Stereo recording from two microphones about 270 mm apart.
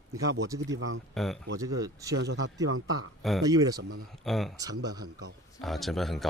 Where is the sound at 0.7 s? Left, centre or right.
Right.